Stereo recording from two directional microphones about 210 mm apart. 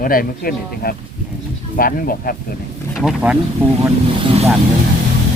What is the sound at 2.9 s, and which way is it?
Speech, 5° right (ahead or behind).